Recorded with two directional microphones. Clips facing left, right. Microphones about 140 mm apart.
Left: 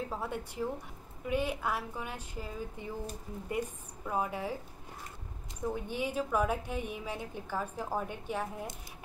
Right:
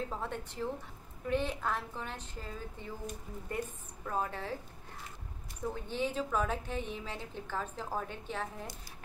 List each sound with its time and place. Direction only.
0.1 s a woman's voice: 10° left (ahead or behind)
5.8 s a woman's voice: 10° left (ahead or behind)